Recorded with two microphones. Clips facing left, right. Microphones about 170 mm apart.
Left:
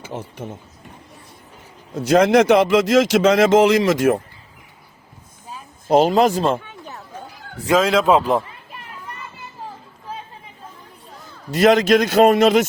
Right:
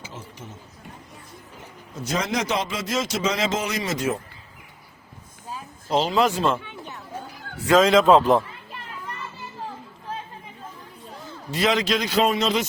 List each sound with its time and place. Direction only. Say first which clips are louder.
0.0 s speech: left 9 dB; 60° left (ahead or behind)
2.0 s speech: left 13 dB; 60° left (ahead or behind); by 4.2 s 80° left
5.9 s speech: left 7 dB; 50° left (ahead or behind)
7.7 s a man's voice: even; centre (ahead or behind)
11.5 s a man's voice: left 9 dB; 50° left (ahead or behind)